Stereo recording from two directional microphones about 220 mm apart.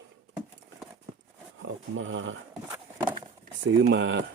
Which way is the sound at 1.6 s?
60° right (ahead or behind).